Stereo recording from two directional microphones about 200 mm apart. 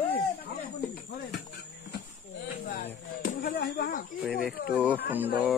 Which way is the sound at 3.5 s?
55° left (ahead or behind).